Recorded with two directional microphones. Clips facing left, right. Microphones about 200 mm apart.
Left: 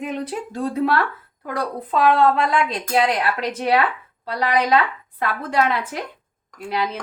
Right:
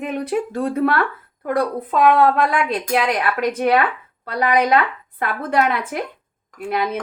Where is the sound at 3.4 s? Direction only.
55° right (ahead or behind).